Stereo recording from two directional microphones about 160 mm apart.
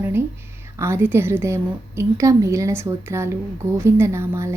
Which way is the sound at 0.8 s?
15° right (ahead or behind).